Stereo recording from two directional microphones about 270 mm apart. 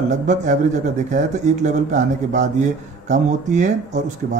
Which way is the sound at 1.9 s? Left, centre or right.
Right.